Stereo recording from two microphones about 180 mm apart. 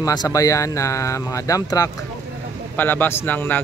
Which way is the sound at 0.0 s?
20° left (ahead or behind).